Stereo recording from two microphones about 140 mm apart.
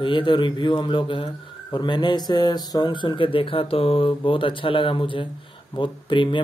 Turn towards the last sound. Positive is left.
turn(degrees=35)  # may be behind; listen again after turning